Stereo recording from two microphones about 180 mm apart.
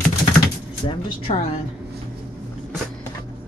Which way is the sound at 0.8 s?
30° left (ahead or behind).